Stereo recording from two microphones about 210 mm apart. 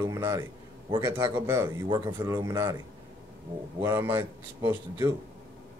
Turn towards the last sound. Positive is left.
turn(degrees=-15)  # may be behind; listen again after turning